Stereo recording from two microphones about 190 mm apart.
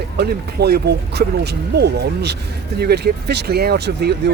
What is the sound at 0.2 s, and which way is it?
Speech, 55° right (ahead or behind).